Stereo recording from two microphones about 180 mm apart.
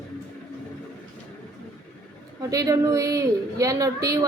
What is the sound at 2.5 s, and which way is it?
A woman's voice, 20° right (ahead or behind).